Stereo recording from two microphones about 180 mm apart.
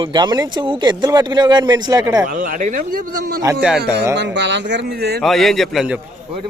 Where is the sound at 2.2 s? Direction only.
45° right (ahead or behind).